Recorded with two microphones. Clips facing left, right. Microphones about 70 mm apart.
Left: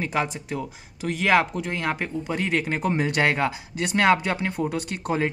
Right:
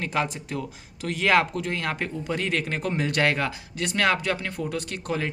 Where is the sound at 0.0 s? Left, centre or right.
Centre.